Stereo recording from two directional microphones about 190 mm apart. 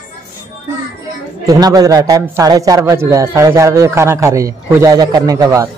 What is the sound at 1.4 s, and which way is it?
A man's voice, 20° right (ahead or behind).